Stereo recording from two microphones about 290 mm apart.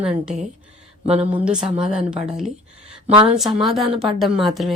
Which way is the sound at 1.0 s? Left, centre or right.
Right.